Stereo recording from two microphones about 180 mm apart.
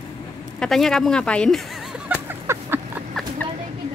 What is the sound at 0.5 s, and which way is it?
Speech, centre (ahead or behind).